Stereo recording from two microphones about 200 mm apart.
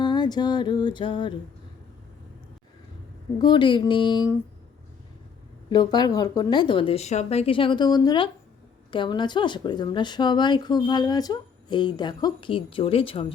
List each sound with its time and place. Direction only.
0.0 s music: 20° left (ahead or behind)
3.3 s speech: 20° left (ahead or behind)
5.7 s speech: 20° left (ahead or behind)